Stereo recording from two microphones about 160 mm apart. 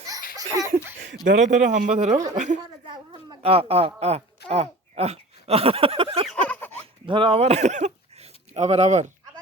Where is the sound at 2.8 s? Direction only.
30° right (ahead or behind).